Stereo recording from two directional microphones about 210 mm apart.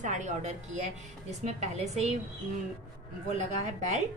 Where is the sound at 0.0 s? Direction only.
35° right (ahead or behind).